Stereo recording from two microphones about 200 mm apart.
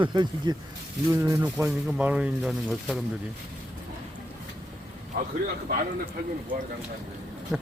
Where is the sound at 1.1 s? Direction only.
10° right (ahead or behind).